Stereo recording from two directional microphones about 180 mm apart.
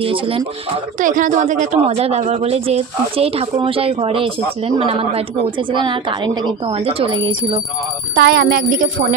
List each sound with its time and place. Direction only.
0.0 s a woman's voice: 30° right (ahead or behind)
0.9 s a woman's voice: 45° right (ahead or behind); by 7.6 s 25° right (ahead or behind)
8.2 s speech: 60° right (ahead or behind)